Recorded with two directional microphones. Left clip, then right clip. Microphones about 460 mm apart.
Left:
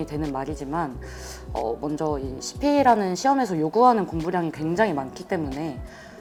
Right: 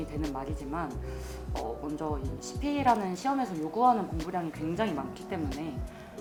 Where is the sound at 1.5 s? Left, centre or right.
Centre.